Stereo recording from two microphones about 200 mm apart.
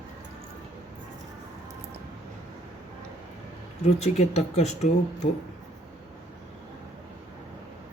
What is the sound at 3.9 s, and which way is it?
Speech, 35° left (ahead or behind).